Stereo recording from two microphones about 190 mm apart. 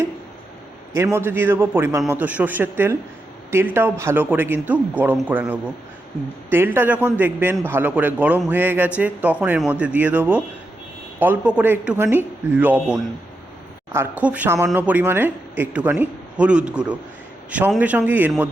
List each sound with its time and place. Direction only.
1.0 s a man's voice: 10° right (ahead or behind)